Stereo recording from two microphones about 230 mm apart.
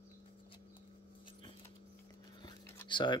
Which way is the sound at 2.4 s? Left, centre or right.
Centre.